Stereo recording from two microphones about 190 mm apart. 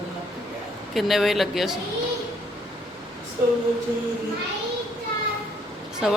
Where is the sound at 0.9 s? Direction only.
Centre (ahead or behind).